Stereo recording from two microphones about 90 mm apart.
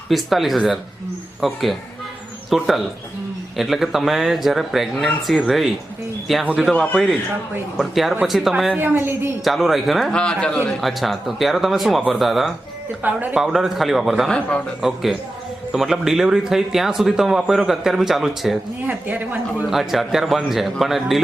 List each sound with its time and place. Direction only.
0.1 s speech: centre (ahead or behind)
7.8 s speech: centre (ahead or behind)
8.7 s a woman's voice: 25° right (ahead or behind)
9.4 s speech: centre (ahead or behind)
10.1 s speech: 10° left (ahead or behind)
13.0 s speech: 15° right (ahead or behind)
18.9 s a woman's voice: 20° right (ahead or behind)
19.7 s speech: centre (ahead or behind)